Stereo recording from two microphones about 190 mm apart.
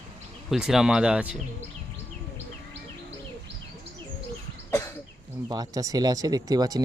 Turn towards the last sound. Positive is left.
turn(degrees=-20)  # may be behind; listen again after turning